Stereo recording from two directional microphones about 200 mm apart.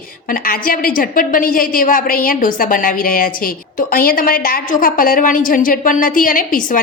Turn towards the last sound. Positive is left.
turn(degrees=45)  # may be behind; listen again after turning